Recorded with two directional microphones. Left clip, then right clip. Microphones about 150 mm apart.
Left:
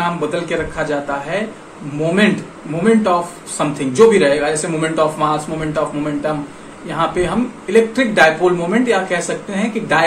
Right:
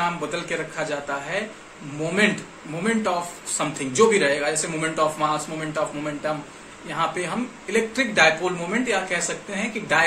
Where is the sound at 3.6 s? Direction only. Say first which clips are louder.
Left 8 dB; centre (ahead or behind).